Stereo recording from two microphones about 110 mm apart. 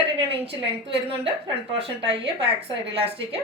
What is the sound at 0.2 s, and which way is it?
A woman's voice, 60° right (ahead or behind).